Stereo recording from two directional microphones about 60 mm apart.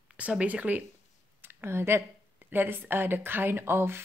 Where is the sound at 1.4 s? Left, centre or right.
Right.